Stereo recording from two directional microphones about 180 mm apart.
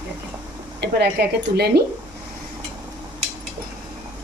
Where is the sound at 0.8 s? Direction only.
65° right (ahead or behind).